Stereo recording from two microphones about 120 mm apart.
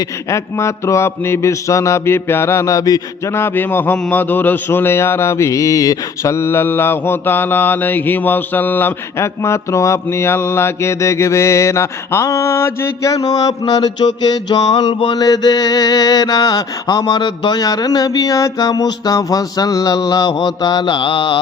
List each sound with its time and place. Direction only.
0.3 s mantra: 25° left (ahead or behind); by 21.3 s 45° left (ahead or behind)